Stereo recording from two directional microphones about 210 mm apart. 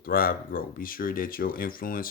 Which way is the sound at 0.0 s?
45° left (ahead or behind).